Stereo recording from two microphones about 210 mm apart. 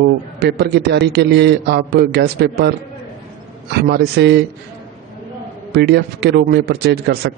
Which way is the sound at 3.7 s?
50° right (ahead or behind).